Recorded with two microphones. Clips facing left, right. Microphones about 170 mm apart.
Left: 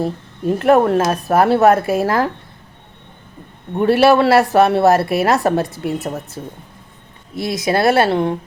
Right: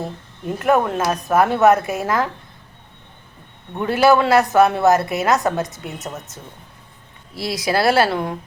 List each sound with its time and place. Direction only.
0.6 s a woman's voice: 35° left (ahead or behind)
3.8 s a woman's voice: 30° left (ahead or behind)
7.3 s speech: 25° left (ahead or behind)